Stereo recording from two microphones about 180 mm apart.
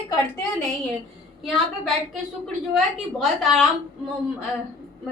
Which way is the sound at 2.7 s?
Centre (ahead or behind).